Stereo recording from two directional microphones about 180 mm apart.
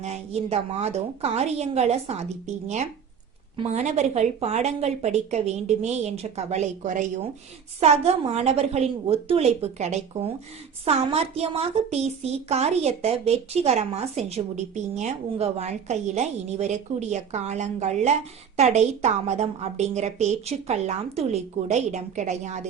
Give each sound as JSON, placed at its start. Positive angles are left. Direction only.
{"t": 0.0, "sound": "a woman's voice", "side_deg": -35}
{"t": 3.6, "sound": "a woman's voice", "side_deg": -40}